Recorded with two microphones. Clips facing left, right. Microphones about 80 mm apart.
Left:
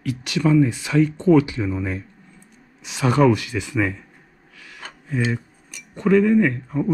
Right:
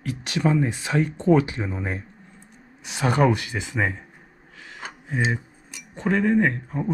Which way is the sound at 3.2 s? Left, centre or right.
Right.